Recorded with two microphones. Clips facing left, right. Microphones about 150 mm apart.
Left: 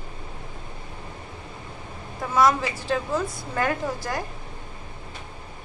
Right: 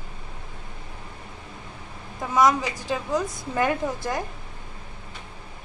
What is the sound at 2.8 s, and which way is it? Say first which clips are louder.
A woman's voice: even; 15° right (ahead or behind).